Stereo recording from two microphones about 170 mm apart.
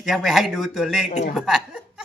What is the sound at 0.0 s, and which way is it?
Speech, centre (ahead or behind).